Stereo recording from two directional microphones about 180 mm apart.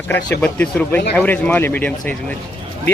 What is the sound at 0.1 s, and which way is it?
Speech, 10° left (ahead or behind).